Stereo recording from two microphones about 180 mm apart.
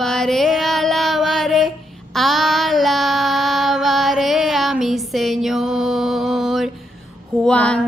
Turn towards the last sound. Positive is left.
turn(degrees=5)  # may be behind; listen again after turning